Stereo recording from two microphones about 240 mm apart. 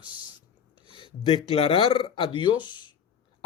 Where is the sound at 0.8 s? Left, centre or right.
Left.